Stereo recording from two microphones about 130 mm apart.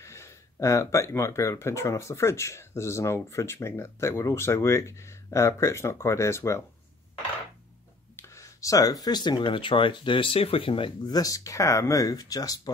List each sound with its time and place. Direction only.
0.0 s speech: 20° left (ahead or behind)
8.2 s speech: 25° left (ahead or behind); by 11.1 s 40° left (ahead or behind)
11.1 s speech: 25° left (ahead or behind)